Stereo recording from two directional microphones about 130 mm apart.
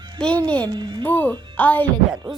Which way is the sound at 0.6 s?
35° right (ahead or behind).